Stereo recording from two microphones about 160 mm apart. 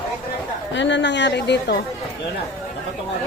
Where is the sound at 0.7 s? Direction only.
90° left.